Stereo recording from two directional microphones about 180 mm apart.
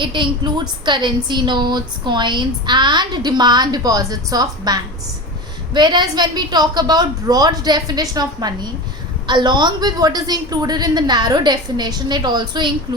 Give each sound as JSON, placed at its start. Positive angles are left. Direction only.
{"t": 0.0, "sound": "a woman's voice", "side_deg": -25}